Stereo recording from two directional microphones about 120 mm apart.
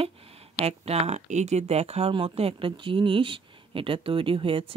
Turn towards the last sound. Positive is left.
turn(degrees=-50)  # may be behind; listen again after turning